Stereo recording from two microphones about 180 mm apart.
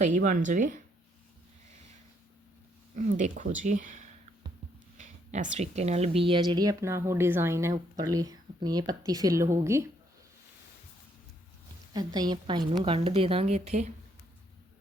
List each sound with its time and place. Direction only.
0.0 s speech: 45° right (ahead or behind)
2.9 s speech: 45° right (ahead or behind); by 9.9 s 15° right (ahead or behind)
11.9 s a woman's voice: 20° right (ahead or behind); by 13.9 s 40° right (ahead or behind)